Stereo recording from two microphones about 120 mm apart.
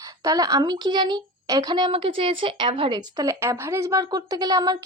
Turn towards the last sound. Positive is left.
turn(degrees=-30)  # may be behind; listen again after turning